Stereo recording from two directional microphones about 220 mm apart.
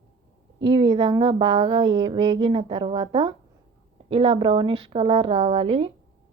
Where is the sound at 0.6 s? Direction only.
20° right (ahead or behind).